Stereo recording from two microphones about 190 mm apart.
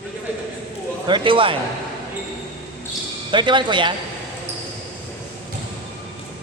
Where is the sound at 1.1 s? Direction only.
25° right (ahead or behind).